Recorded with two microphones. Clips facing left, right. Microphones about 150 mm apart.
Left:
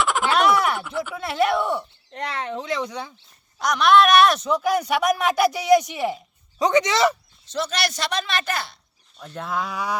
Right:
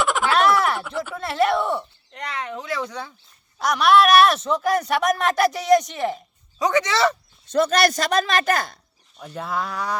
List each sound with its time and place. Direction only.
0.0 s a sound: centre (ahead or behind)
2.1 s speech: 30° left (ahead or behind); by 3.1 s 15° left (ahead or behind)
3.6 s speech: 5° right (ahead or behind)
6.6 s speech: 20° left (ahead or behind)
7.5 s speech: 50° right (ahead or behind)
9.1 s speech: 5° right (ahead or behind)